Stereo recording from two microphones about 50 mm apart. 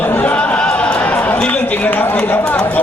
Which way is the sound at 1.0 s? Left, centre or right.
Left.